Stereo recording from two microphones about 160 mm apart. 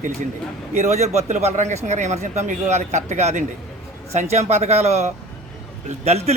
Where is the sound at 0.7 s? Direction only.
45° right (ahead or behind).